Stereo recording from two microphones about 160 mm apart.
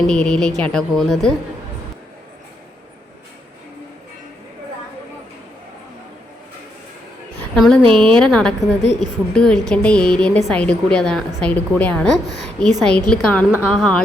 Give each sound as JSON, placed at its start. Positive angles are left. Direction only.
{"t": 0.1, "sound": "a woman's voice", "side_deg": 5}
{"t": 7.5, "sound": "a woman's voice", "side_deg": 5}
{"t": 7.8, "sound": "a woman's voice", "side_deg": -35}
{"t": 8.2, "sound": "a woman's voice", "side_deg": 5}